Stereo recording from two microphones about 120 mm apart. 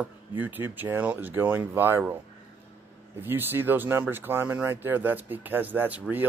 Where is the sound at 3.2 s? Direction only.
20° right (ahead or behind).